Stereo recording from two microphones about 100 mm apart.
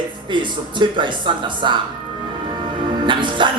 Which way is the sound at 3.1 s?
55° right (ahead or behind).